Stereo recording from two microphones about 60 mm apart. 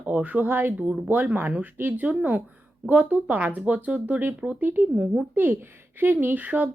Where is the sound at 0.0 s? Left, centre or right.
Right.